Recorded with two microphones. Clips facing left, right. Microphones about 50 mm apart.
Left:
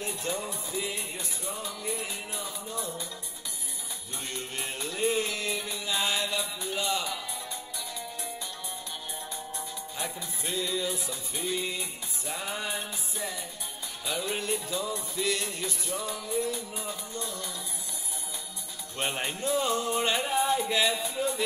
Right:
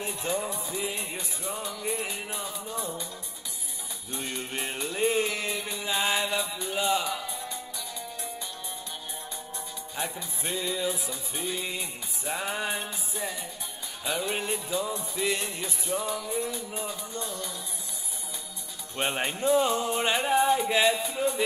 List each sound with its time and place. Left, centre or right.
0.0 s music: right
4.1 s music: right
10.4 s music: right
12.3 s music: right
18.9 s music: right